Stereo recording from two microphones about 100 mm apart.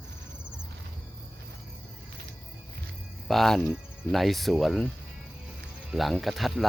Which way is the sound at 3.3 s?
Centre (ahead or behind).